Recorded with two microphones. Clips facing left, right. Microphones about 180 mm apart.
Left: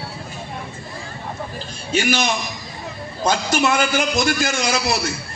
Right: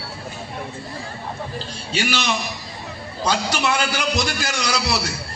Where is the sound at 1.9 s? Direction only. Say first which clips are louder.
Left 3 dB; 50° left (ahead or behind).